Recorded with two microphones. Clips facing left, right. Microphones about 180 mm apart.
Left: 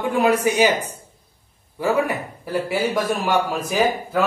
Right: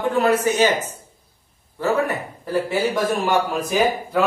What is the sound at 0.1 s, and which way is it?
Speech, 10° left (ahead or behind).